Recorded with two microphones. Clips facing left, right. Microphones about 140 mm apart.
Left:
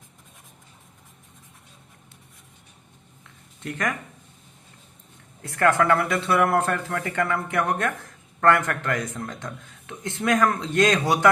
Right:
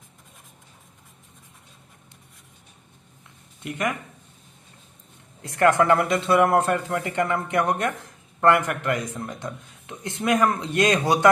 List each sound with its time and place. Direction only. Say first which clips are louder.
3.6 s speech: right 1 dB; 15° right (ahead or behind)
5.4 s speech: right 2 dB; 20° right (ahead or behind)